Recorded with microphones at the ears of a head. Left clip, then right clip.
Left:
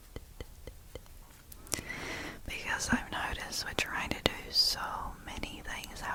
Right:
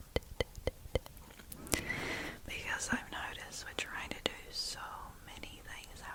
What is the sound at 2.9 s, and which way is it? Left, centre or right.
Whispering, left.